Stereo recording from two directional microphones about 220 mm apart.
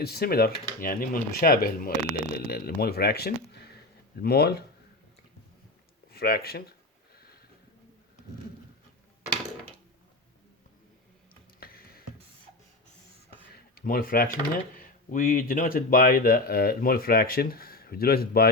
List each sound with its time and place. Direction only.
0.0 s speech: 45° left (ahead or behind)
6.1 s speech: 45° left (ahead or behind)
11.6 s music: 45° left (ahead or behind)
13.7 s speech: 40° left (ahead or behind)